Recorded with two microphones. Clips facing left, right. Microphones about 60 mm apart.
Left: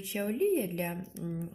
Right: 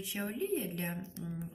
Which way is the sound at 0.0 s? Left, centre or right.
Left.